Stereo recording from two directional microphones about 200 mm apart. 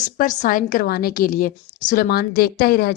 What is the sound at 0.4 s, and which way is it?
A woman's voice, 45° left (ahead or behind).